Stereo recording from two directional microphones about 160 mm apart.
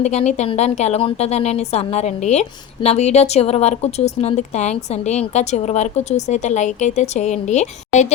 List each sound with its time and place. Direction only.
0.0 s a woman's voice: 45° left (ahead or behind)